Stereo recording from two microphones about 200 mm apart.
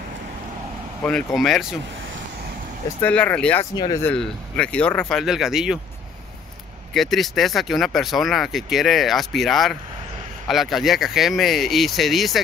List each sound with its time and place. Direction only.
1.0 s speech: centre (ahead or behind)
3.0 s speech: 5° left (ahead or behind)
3.7 s speech: 20° left (ahead or behind)
4.1 s speech: 5° left (ahead or behind)
6.9 s speech: centre (ahead or behind)